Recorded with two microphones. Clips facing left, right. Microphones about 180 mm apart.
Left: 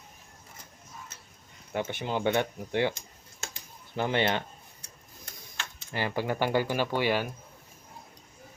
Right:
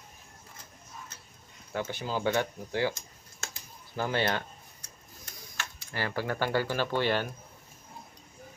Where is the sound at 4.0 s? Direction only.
20° left (ahead or behind).